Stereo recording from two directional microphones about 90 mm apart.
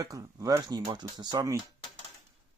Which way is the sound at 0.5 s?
50° right (ahead or behind).